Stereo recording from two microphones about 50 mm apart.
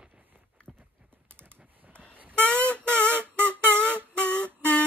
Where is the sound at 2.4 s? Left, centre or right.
Left.